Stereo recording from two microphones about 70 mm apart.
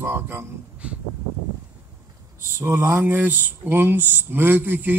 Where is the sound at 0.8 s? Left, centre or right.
Centre.